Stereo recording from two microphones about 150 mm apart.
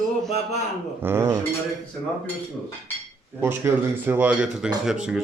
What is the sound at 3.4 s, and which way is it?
A man's voice, 15° right (ahead or behind).